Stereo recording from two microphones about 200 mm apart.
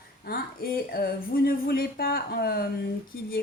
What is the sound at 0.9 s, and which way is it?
A woman's voice, 45° left (ahead or behind).